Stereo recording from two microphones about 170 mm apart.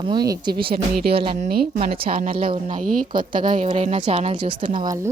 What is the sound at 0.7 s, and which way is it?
Speech, 65° right (ahead or behind).